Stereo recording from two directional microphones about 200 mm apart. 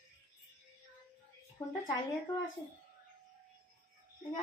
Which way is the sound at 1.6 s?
15° left (ahead or behind).